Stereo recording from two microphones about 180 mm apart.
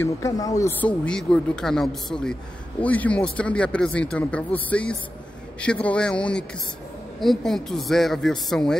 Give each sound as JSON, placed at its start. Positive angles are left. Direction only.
{"t": 0.0, "sound": "speech", "side_deg": 20}